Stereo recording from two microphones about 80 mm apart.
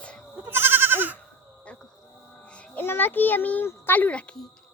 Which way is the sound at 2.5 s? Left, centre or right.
Left.